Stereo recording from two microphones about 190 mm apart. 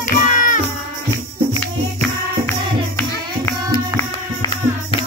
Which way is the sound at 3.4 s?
15° left (ahead or behind).